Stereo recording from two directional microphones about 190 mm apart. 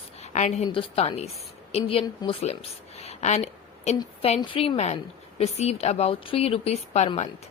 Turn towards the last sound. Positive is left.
turn(degrees=35)  # may be behind; listen again after turning